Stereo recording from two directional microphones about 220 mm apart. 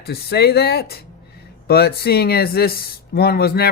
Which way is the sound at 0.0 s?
45° left (ahead or behind).